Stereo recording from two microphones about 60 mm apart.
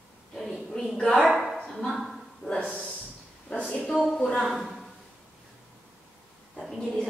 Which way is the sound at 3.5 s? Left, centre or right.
Left.